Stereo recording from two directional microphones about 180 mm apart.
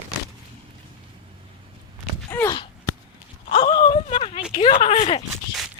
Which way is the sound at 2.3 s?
15° left (ahead or behind).